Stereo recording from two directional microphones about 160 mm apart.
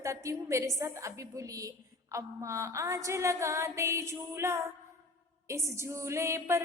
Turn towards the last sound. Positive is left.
turn(degrees=-20)  # may be behind; listen again after turning